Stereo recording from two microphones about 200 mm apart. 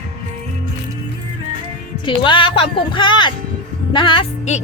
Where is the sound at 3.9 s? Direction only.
25° left (ahead or behind).